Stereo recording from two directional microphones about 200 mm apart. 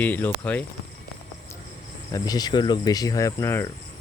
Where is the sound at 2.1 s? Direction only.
20° left (ahead or behind).